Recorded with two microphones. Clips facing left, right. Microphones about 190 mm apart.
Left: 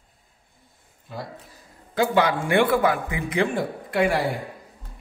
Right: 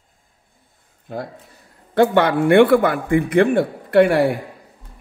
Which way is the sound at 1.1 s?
55° right (ahead or behind).